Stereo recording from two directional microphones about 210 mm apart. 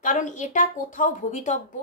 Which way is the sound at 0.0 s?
35° left (ahead or behind).